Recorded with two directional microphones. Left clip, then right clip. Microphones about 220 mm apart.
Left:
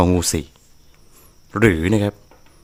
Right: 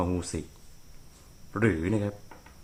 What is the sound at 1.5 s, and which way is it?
Speech, 50° left (ahead or behind).